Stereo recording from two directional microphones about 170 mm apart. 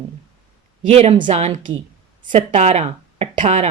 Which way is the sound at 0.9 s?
40° right (ahead or behind).